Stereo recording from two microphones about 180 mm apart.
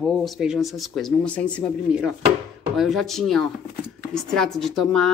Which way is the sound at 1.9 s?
5° right (ahead or behind).